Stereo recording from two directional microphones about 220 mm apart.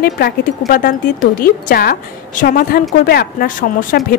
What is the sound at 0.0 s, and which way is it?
A woman's voice, 40° left (ahead or behind).